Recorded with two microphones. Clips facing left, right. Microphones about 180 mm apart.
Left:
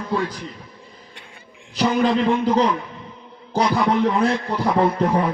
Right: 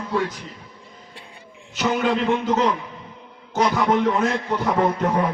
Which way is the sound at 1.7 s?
35° left (ahead or behind).